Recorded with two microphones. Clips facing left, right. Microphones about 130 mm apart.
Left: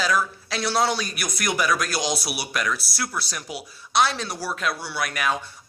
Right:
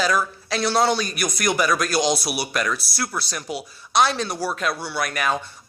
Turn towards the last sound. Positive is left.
turn(degrees=5)  # may be behind; listen again after turning